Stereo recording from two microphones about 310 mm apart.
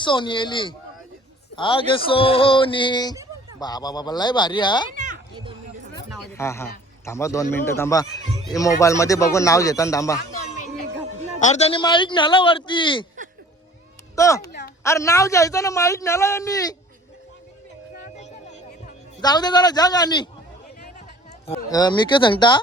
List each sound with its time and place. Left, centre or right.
0.0 s a man's voice: centre
4.9 s children playing: right
6.1 s a man's voice: centre
11.3 s a man's voice: left
14.2 s a man's voice: centre
17.9 s a sound: left
19.2 s a man's voice: centre
21.4 s a man's voice: centre